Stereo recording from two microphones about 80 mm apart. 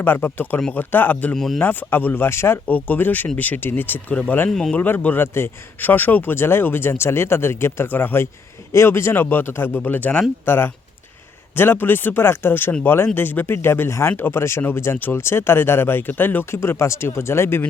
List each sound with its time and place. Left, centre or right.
0.0 s speech: left
1.4 s speech: centre
1.6 s speech: left
2.6 s speech: left
4.1 s speech: centre
4.7 s speech: left